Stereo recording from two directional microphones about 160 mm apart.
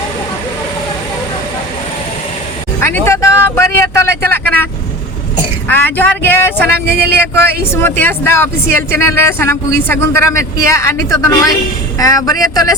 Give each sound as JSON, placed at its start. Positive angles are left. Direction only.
{"t": 2.8, "sound": "speech", "side_deg": 15}
{"t": 6.7, "sound": "speech", "side_deg": -85}
{"t": 7.7, "sound": "speech", "side_deg": 15}